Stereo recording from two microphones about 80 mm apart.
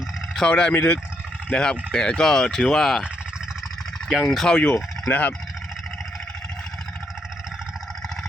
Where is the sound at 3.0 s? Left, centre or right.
Centre.